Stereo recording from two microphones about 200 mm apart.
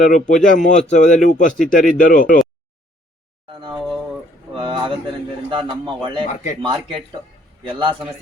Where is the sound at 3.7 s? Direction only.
Centre (ahead or behind).